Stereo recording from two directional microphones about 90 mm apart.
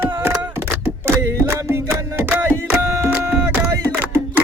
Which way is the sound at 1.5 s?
30° right (ahead or behind).